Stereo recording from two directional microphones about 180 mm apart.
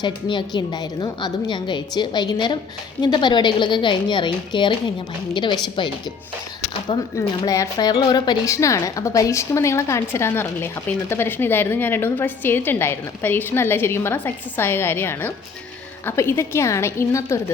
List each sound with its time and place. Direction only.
0.0 s a woman's voice: 25° left (ahead or behind)
6.8 s a woman's voice: 20° left (ahead or behind)